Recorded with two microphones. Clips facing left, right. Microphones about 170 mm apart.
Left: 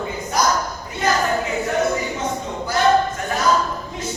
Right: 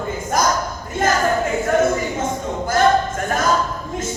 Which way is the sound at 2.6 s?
50° right (ahead or behind).